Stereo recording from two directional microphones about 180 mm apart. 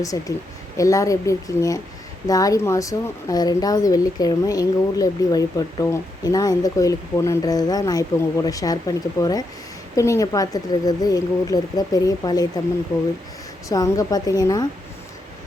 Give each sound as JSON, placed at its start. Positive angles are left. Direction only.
{"t": 0.0, "sound": "speech", "side_deg": 20}
{"t": 13.7, "sound": "speech", "side_deg": 20}